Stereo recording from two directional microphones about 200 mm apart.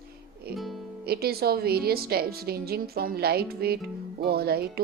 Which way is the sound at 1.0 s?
50° right (ahead or behind).